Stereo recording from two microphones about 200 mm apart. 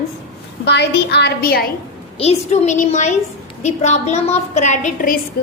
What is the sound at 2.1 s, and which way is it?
A woman's voice, 30° left (ahead or behind).